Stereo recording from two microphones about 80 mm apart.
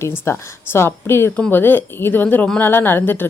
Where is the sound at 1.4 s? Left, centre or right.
Left.